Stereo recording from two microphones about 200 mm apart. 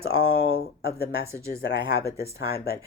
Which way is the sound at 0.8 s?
50° left (ahead or behind).